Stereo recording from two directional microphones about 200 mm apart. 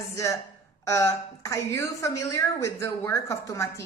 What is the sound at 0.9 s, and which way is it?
A woman's voice, 15° left (ahead or behind).